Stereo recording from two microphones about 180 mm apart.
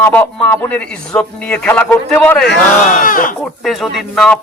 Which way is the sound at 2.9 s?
50° left (ahead or behind).